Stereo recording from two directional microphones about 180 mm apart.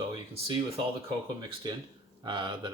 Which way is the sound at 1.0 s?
25° right (ahead or behind).